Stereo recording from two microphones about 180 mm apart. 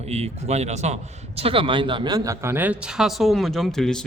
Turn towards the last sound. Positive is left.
turn(degrees=5)  # may be behind; listen again after turning